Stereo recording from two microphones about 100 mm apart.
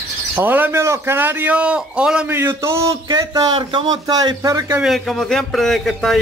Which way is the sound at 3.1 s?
45° right (ahead or behind).